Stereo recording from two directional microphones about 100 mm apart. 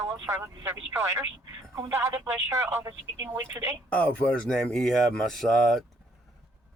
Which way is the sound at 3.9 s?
10° left (ahead or behind).